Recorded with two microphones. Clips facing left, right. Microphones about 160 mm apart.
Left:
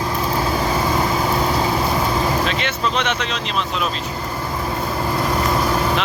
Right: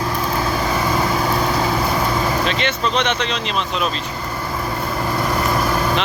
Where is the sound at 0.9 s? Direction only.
5° left (ahead or behind).